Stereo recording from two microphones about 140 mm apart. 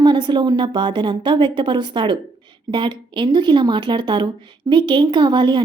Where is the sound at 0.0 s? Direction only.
35° right (ahead or behind).